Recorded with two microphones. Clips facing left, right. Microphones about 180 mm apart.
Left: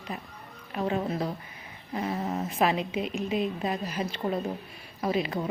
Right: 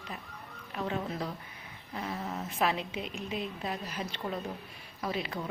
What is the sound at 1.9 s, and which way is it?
Speech, 15° left (ahead or behind).